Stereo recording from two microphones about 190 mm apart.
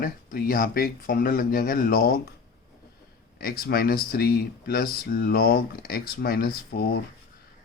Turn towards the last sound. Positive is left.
turn(degrees=55)  # may be behind; listen again after turning